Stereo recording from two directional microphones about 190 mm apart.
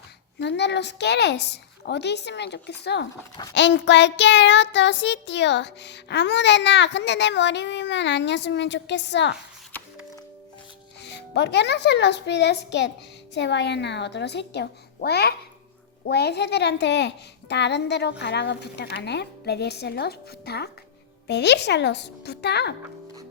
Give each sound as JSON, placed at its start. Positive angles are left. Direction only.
{"t": 0.3, "sound": "a woman's voice", "side_deg": 65}
{"t": 3.5, "sound": "child singing", "side_deg": 70}
{"t": 11.0, "sound": "a woman's voice", "side_deg": 65}